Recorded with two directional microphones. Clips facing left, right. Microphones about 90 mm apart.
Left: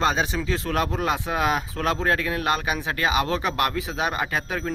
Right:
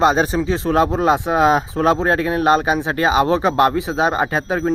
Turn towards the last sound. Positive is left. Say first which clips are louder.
# right 8 dB
turn(degrees=-30)  # may be behind; listen again after turning